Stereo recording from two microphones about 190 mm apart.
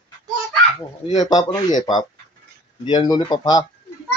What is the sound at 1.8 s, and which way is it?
Speech, 25° left (ahead or behind).